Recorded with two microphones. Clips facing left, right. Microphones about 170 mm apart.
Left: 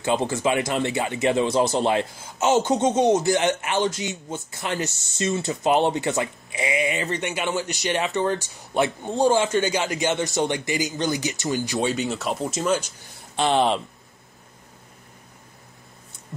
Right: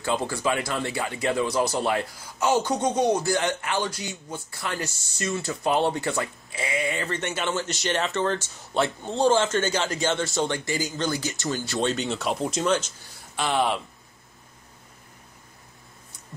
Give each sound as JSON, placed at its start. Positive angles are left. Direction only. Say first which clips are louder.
{"t": 0.0, "sound": "speech", "louder": "left 4 dB", "side_deg": 20}
{"t": 11.9, "sound": "speech", "louder": "left 1 dB", "side_deg": 0}
{"t": 13.4, "sound": "speech", "louder": "left 4 dB", "side_deg": 25}